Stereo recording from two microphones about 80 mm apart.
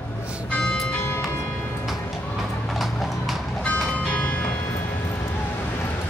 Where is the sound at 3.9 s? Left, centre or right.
Centre.